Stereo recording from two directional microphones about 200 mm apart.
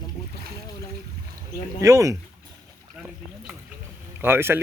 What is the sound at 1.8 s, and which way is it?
Speech, 15° right (ahead or behind).